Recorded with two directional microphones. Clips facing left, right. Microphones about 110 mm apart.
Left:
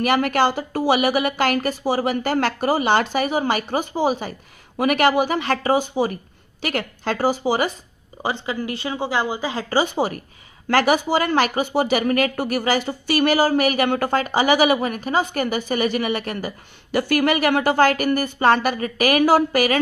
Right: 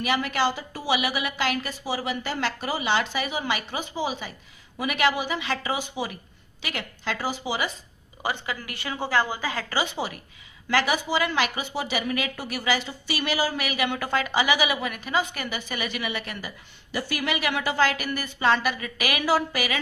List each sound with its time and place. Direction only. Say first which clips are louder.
0.0 s speech: left 6 dB; 55° left (ahead or behind)
8.2 s speech: left 5 dB; 25° left (ahead or behind); by 19.8 s 50° left (ahead or behind)